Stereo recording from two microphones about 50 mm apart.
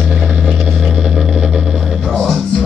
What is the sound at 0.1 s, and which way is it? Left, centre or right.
Vehicle, centre.